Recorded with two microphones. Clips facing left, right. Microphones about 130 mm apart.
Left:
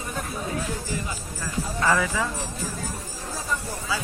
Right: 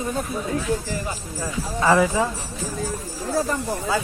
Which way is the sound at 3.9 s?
50° right (ahead or behind).